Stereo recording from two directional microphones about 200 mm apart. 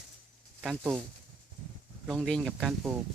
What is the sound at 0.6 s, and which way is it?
Speech, centre (ahead or behind).